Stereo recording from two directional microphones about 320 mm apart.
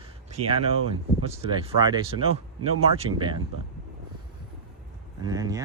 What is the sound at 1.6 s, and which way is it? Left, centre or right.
Speech, centre.